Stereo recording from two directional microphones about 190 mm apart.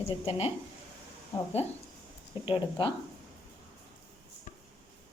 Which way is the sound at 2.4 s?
25° left (ahead or behind).